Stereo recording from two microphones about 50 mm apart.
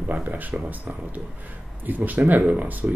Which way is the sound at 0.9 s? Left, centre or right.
Right.